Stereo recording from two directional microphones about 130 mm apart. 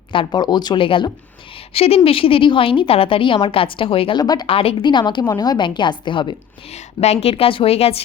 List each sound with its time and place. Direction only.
0.1 s a woman's voice: 40° left (ahead or behind)
4.2 s a woman's voice: 30° left (ahead or behind)
4.4 s a woman's voice: 45° left (ahead or behind)
6.7 s a woman's voice: 55° left (ahead or behind)